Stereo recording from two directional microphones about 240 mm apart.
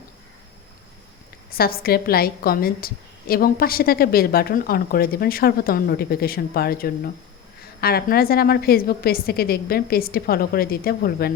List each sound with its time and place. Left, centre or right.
1.5 s a woman's voice: left